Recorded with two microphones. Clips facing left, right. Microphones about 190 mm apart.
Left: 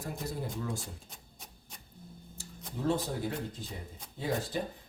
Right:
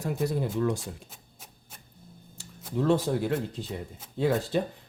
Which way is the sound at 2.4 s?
70° right (ahead or behind).